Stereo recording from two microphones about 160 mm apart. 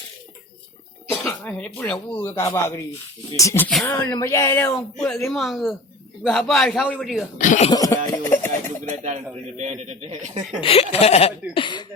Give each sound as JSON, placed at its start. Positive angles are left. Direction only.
{"t": 1.1, "sound": "speech", "side_deg": 10}
{"t": 4.7, "sound": "a man's voice", "side_deg": 0}
{"t": 7.3, "sound": "speech", "side_deg": 50}
{"t": 7.7, "sound": "beatboxing", "side_deg": 20}
{"t": 8.8, "sound": "speech", "side_deg": -45}
{"t": 10.6, "sound": "speech", "side_deg": 35}